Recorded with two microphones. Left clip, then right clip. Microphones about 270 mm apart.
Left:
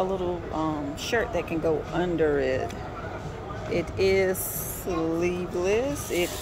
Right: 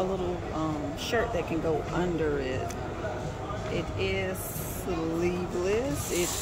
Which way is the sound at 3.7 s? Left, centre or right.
Centre.